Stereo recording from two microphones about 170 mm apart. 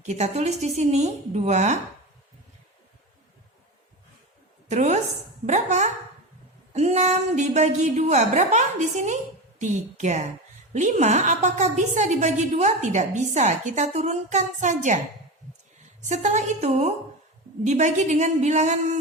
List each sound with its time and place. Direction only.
0.0 s a woman's voice: 40° right (ahead or behind)
4.7 s a woman's voice: 45° right (ahead or behind)
16.0 s a woman's voice: 45° right (ahead or behind)